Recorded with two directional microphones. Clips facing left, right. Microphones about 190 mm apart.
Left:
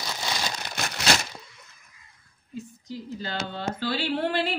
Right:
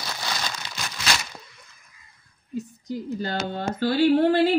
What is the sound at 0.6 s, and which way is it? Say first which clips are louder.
Crumpling: left 3 dB; 55° left (ahead or behind).